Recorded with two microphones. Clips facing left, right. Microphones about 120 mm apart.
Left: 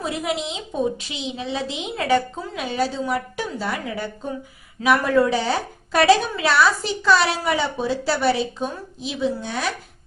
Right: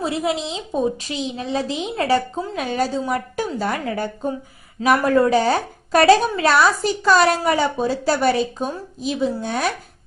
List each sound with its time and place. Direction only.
0.0 s a woman's voice: 30° right (ahead or behind)
2.6 s a woman's voice: 45° right (ahead or behind)